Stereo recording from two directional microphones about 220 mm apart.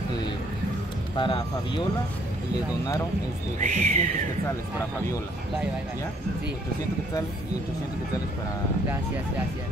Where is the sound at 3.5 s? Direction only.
35° right (ahead or behind).